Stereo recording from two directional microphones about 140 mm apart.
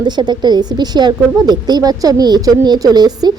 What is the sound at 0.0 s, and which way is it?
A woman's voice, 30° right (ahead or behind).